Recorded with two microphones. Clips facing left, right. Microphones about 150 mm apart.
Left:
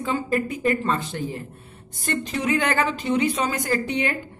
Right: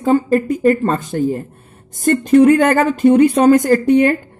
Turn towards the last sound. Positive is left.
turn(degrees=-45)  # may be behind; listen again after turning